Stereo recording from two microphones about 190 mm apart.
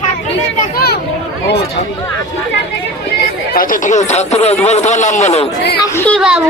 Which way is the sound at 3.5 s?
45° left (ahead or behind).